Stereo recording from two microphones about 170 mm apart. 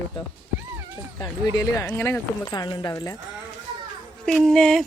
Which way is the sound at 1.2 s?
20° left (ahead or behind).